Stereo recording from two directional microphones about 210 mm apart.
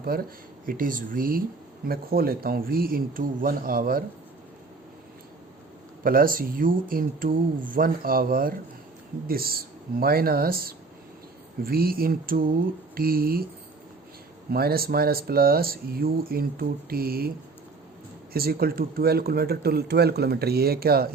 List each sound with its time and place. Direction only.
0.0 s speech: 45° right (ahead or behind)
6.0 s speech: 45° right (ahead or behind)
14.5 s speech: 45° right (ahead or behind)
18.3 s speech: 45° right (ahead or behind)